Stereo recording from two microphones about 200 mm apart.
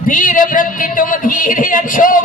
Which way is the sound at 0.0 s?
40° left (ahead or behind).